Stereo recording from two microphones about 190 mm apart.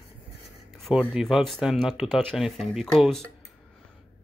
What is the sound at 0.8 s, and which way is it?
Speech, centre (ahead or behind).